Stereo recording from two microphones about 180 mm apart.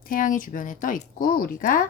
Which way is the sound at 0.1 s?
50° left (ahead or behind).